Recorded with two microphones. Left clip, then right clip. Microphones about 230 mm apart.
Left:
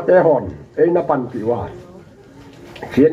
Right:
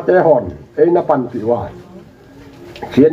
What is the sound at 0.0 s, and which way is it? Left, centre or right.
Speech, right.